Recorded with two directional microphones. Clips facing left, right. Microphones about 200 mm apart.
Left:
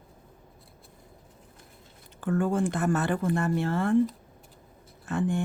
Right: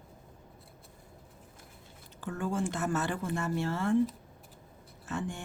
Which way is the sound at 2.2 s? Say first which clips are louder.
Left 7 dB; 55° left (ahead or behind).